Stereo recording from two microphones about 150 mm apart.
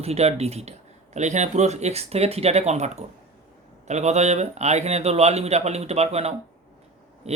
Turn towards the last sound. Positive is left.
turn(degrees=-45)  # may be behind; listen again after turning